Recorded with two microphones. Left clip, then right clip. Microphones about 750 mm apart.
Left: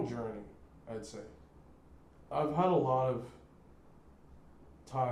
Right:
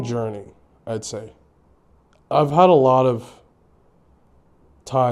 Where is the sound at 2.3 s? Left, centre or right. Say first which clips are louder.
Right 17 dB; right.